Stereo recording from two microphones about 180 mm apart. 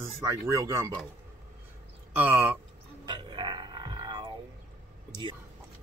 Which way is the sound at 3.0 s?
25° right (ahead or behind).